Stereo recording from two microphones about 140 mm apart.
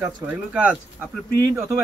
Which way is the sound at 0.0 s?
10° right (ahead or behind).